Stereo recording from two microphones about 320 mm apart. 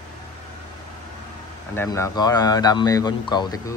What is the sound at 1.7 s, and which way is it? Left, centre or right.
A man's voice, centre.